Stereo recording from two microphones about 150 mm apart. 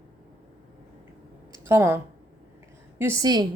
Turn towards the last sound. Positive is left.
turn(degrees=-15)  # may be behind; listen again after turning